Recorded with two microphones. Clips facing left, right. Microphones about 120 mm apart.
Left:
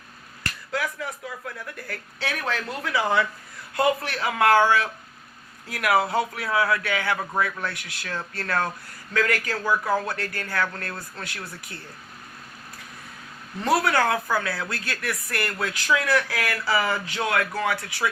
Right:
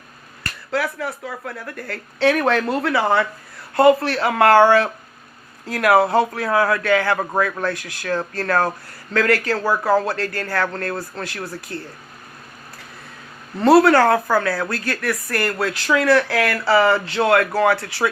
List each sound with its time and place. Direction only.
0.7 s speech: 70° right (ahead or behind)
9.6 s speech: 45° right (ahead or behind)
10.1 s speech: 65° right (ahead or behind)
13.7 s speech: 60° right (ahead or behind)
17.2 s speech: 60° right (ahead or behind)